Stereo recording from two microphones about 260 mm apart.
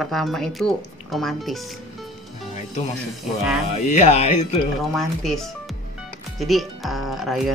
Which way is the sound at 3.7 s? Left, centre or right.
Left.